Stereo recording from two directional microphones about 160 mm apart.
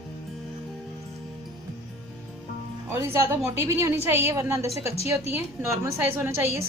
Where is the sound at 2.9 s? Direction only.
15° right (ahead or behind).